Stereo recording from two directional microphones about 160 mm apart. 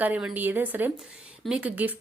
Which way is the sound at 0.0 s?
10° right (ahead or behind).